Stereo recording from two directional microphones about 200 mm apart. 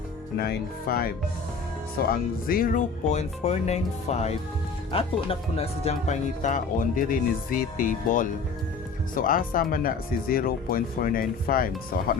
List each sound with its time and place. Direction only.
0.3 s speech: 50° left (ahead or behind)